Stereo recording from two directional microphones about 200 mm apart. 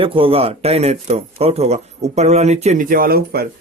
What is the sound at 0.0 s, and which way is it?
Speech, 25° right (ahead or behind).